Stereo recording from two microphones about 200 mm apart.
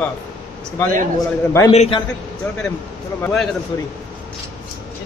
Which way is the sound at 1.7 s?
30° left (ahead or behind).